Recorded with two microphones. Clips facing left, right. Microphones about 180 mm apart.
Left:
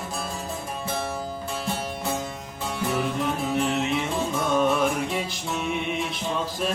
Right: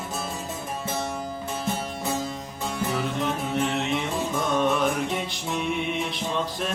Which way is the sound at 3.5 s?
Centre (ahead or behind).